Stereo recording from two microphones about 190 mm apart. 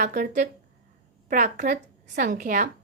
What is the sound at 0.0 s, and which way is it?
A woman's voice, 40° right (ahead or behind).